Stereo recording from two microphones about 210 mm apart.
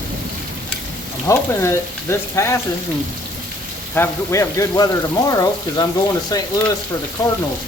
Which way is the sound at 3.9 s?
10° left (ahead or behind).